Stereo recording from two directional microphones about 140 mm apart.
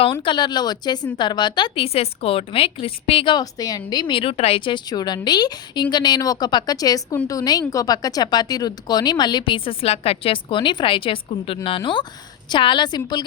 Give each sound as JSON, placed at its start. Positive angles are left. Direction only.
{"t": 0.0, "sound": "a woman's voice", "side_deg": 35}